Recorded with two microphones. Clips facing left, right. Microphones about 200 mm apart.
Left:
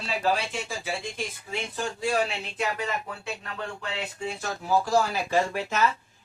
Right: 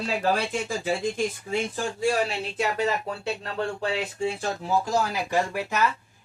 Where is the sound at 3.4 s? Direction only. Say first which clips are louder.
Right 9 dB; 30° right (ahead or behind).